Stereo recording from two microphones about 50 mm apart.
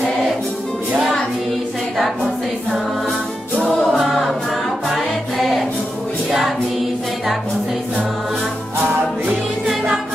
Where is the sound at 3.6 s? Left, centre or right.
Centre.